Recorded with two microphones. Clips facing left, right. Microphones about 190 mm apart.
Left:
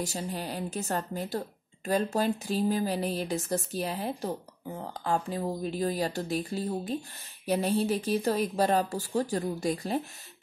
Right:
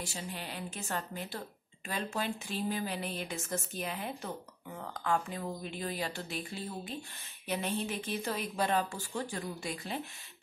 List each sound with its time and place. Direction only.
0.0 s speech: 40° left (ahead or behind)